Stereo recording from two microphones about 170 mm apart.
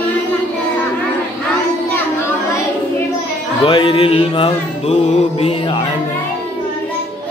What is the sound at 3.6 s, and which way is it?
Music, 30° left (ahead or behind).